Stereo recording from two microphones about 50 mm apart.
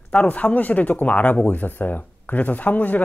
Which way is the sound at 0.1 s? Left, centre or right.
Left.